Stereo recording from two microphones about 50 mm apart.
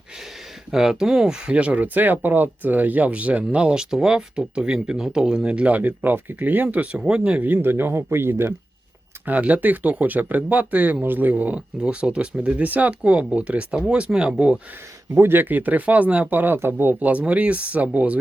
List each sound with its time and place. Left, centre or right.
0.7 s speech: centre; by 6.8 s right
6.9 s speech: centre
7.3 s speech: right
9.2 s speech: right
11.0 s speech: right
11.8 s speech: right
15.1 s speech: right
16.6 s speech: right